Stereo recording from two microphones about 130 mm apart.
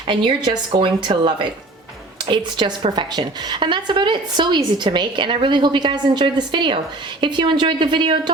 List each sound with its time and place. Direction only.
0.1 s a woman's voice: 40° right (ahead or behind)